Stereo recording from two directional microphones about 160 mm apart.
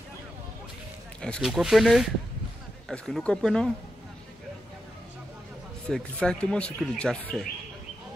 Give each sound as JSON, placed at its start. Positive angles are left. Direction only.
{"t": 1.2, "sound": "speech", "side_deg": 0}
{"t": 5.9, "sound": "speech", "side_deg": 5}